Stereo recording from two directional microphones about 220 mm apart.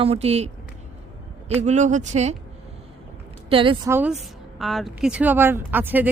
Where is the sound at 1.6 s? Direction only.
35° right (ahead or behind).